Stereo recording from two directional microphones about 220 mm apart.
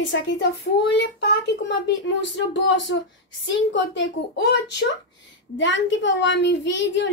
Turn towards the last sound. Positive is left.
turn(degrees=55)  # may be behind; listen again after turning